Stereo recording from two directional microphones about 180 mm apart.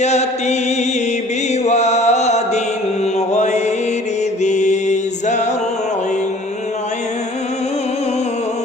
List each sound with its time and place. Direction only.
0.0 s chant: 40° left (ahead or behind)
1.6 s chant: 40° left (ahead or behind)
4.4 s mantra: 40° left (ahead or behind)